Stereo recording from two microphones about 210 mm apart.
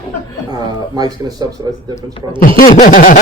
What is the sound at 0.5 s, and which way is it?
Speech, 20° right (ahead or behind).